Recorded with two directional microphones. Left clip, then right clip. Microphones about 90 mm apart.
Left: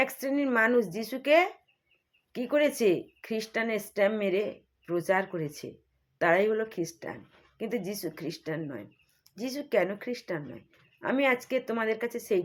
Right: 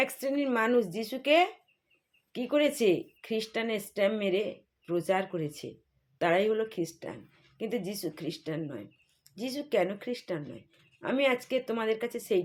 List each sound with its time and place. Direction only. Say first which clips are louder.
0.0 s a woman's voice: left 1 dB; 20° right (ahead or behind)